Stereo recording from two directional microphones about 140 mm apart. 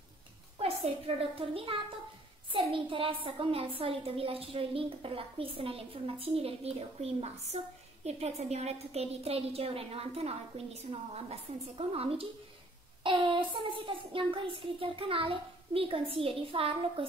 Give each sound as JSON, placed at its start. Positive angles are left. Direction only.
{"t": 1.3, "sound": "a woman's voice", "side_deg": -40}